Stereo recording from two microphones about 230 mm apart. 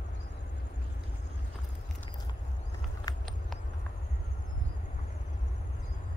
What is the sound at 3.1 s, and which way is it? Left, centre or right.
Horse, centre.